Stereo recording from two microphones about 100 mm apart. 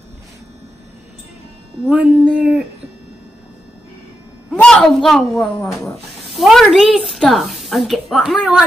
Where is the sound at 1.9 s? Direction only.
10° right (ahead or behind).